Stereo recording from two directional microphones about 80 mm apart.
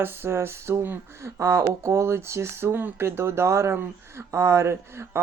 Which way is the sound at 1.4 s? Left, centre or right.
Right.